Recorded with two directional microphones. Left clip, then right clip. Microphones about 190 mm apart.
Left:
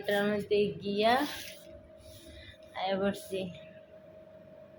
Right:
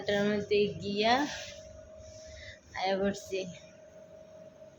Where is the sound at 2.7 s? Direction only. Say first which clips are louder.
Right 1 dB; 15° right (ahead or behind).